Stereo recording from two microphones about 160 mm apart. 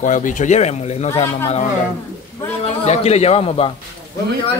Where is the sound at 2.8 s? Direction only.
45° left (ahead or behind).